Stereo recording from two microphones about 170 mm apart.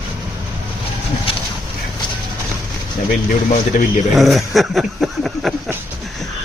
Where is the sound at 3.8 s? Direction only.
45° left (ahead or behind).